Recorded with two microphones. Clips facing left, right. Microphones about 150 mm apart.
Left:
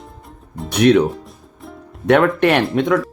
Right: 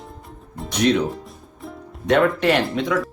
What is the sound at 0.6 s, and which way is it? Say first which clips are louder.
Speech: left 6 dB; 60° left (ahead or behind).